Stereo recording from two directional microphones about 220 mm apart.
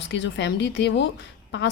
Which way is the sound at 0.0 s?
55° left (ahead or behind).